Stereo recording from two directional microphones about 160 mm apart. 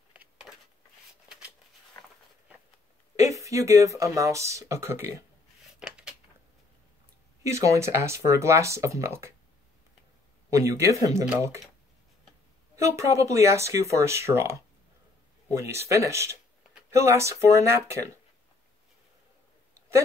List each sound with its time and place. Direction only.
0.1 s a sound: 5° right (ahead or behind)
3.2 s speech: 20° right (ahead or behind)
5.8 s a sound: 5° right (ahead or behind)
7.4 s speech: 20° right (ahead or behind)
10.5 s speech: 20° right (ahead or behind)
12.7 s speech: 20° right (ahead or behind)